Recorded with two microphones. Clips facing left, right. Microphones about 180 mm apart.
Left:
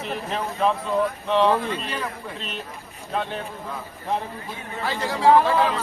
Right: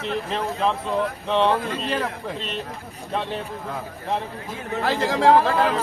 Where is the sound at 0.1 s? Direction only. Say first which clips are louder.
Right 3 dB; centre (ahead or behind).